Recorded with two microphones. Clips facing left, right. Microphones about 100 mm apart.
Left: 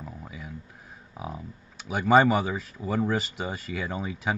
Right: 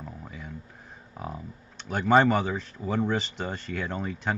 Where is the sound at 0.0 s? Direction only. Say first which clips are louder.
Even; 5° left (ahead or behind).